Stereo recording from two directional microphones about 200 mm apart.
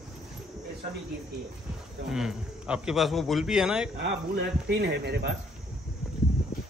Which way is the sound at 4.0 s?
55° right (ahead or behind).